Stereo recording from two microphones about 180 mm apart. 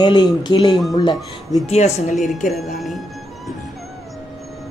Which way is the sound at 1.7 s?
40° left (ahead or behind).